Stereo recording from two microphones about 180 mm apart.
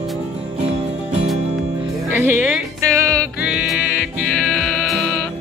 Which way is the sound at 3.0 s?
5° left (ahead or behind).